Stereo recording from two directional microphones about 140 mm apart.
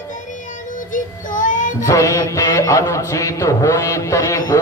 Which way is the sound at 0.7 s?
70° left (ahead or behind).